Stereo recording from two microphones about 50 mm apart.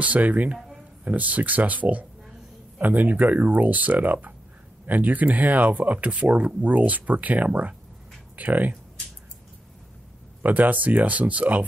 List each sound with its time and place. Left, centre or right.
0.0 s speech: right
10.4 s speech: right